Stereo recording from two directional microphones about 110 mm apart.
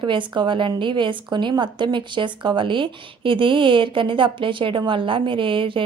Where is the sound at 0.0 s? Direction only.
45° right (ahead or behind).